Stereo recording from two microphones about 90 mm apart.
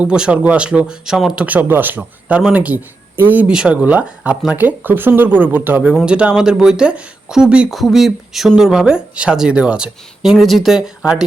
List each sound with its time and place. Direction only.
0.0 s speech: 10° right (ahead or behind)
1.5 s speech: 20° right (ahead or behind)
5.9 s speech: 10° right (ahead or behind)